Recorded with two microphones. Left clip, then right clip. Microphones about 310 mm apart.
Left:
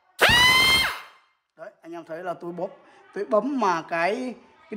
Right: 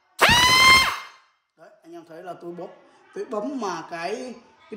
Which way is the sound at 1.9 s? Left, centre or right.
Centre.